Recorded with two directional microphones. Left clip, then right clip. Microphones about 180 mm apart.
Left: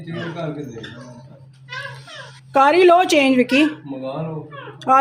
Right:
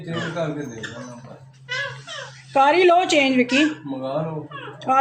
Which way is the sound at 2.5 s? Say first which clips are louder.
Left 3 dB; 35° left (ahead or behind).